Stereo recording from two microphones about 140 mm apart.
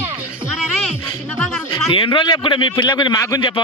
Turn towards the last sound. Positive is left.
turn(degrees=35)  # may be behind; listen again after turning